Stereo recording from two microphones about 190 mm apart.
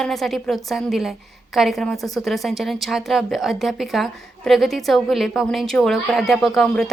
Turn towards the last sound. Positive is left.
turn(degrees=0)  # may be behind; listen again after turning